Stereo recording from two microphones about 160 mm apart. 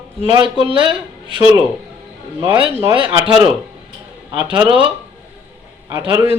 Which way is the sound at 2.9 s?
30° right (ahead or behind).